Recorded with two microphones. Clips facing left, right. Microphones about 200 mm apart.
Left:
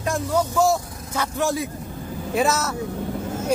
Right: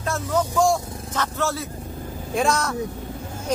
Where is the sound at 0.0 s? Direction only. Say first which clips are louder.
Left 1 dB; 10° left (ahead or behind).